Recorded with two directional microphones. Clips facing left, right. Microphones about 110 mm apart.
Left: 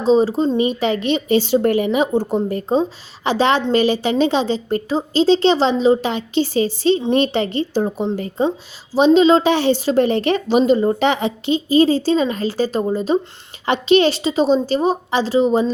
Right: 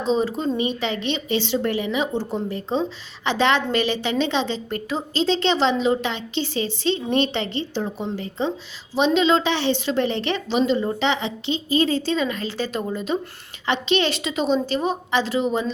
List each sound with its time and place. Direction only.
0.0 s a woman's voice: 35° left (ahead or behind)